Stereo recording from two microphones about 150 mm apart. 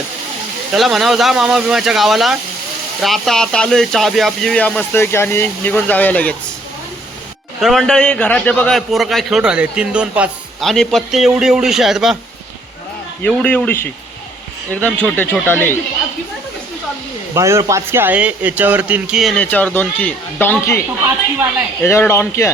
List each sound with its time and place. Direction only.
0.8 s a man's voice: centre (ahead or behind)
7.6 s a man's voice: centre (ahead or behind)
13.2 s speech: 10° left (ahead or behind)
17.3 s speech: 20° right (ahead or behind); by 20.8 s 15° left (ahead or behind)
21.8 s speech: 15° left (ahead or behind)